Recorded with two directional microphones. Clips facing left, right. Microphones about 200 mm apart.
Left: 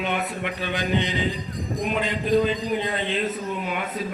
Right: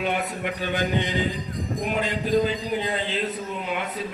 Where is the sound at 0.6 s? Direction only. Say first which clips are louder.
Even; 45° right (ahead or behind).